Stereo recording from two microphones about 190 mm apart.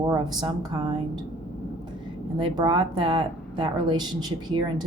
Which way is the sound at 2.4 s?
25° right (ahead or behind).